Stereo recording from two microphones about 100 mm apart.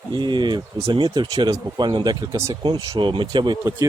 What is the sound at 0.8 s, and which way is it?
Speech, 65° right (ahead or behind).